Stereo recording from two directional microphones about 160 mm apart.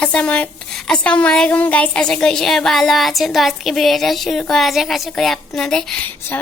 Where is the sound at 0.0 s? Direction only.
5° left (ahead or behind).